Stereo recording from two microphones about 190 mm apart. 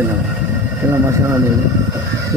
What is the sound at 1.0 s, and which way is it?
Speech, 15° right (ahead or behind).